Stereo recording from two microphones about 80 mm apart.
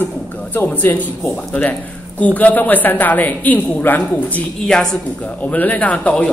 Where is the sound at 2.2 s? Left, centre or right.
Centre.